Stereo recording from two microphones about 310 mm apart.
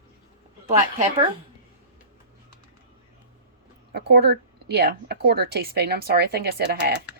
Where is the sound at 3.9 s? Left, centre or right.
Right.